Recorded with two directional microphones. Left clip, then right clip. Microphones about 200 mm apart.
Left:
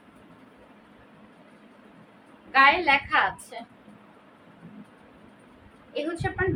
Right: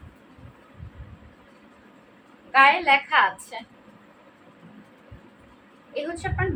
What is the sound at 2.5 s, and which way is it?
Speech, 10° left (ahead or behind).